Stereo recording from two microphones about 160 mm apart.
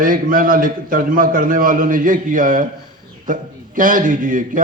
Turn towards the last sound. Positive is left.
turn(degrees=-55)  # may be behind; listen again after turning